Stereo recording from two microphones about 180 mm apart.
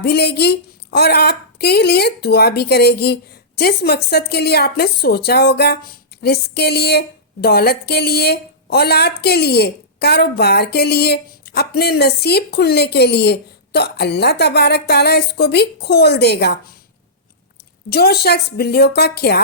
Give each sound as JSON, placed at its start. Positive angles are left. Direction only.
{"t": 0.0, "sound": "a woman's voice", "side_deg": 65}
{"t": 17.8, "sound": "a woman's voice", "side_deg": 60}